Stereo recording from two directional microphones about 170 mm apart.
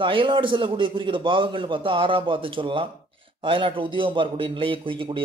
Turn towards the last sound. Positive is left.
turn(degrees=-30)  # may be behind; listen again after turning